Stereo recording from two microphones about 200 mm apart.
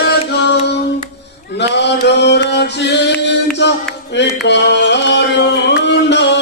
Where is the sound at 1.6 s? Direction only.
60° left (ahead or behind).